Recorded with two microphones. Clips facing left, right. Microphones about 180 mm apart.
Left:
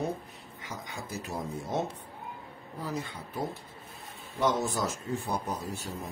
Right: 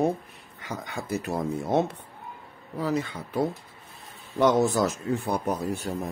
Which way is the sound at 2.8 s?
80° right.